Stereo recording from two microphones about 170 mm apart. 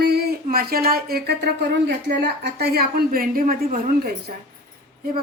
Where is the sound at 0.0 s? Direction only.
65° right (ahead or behind).